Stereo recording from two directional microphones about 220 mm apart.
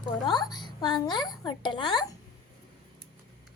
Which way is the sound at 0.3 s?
20° left (ahead or behind).